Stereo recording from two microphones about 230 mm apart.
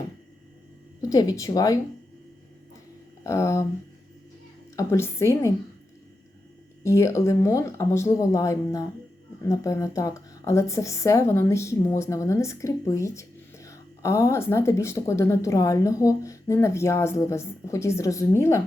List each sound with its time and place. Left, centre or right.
1.0 s a woman's voice: centre
3.2 s a woman's voice: centre
4.8 s a woman's voice: centre
6.8 s a woman's voice: centre